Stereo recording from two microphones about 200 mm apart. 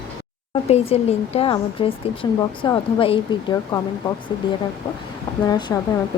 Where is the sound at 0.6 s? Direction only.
30° left (ahead or behind).